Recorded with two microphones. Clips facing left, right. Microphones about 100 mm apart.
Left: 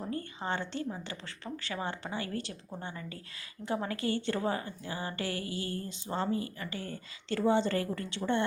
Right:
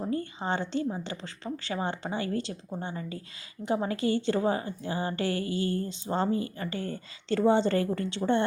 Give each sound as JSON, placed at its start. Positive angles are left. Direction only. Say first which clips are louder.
{"t": 0.0, "sound": "a woman's voice", "louder": "right 5 dB", "side_deg": -25}